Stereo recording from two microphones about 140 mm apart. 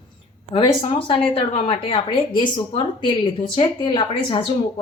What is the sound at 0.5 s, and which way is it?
A woman's voice, 40° left (ahead or behind).